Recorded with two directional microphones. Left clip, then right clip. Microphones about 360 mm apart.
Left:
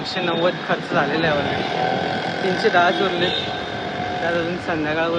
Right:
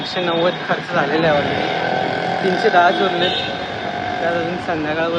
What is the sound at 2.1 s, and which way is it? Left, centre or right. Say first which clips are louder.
Vehicle: right 3 dB; centre.